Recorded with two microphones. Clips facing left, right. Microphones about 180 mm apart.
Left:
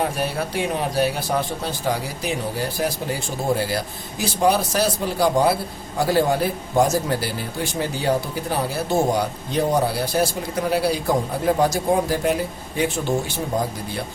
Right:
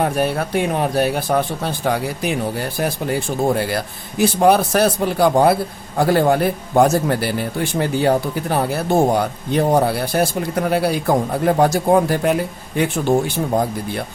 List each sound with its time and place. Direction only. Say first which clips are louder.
0.0 s a man's voice: right 5 dB; 55° right (ahead or behind)